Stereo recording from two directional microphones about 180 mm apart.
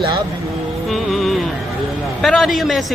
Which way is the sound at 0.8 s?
Centre (ahead or behind).